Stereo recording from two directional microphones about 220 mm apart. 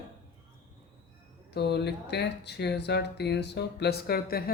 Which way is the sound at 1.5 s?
50° left (ahead or behind).